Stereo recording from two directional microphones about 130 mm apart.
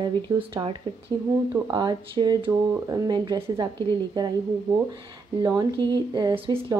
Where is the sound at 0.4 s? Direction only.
45° right (ahead or behind).